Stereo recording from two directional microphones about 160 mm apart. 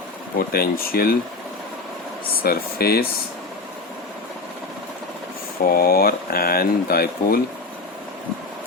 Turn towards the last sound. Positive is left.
turn(degrees=70)  # may be behind; listen again after turning